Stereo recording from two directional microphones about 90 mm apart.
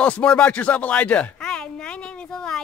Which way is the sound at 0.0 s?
10° left (ahead or behind).